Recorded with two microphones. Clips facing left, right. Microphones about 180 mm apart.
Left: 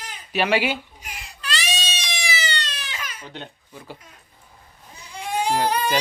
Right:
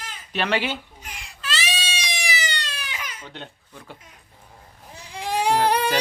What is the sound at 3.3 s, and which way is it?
Speech, 5° left (ahead or behind).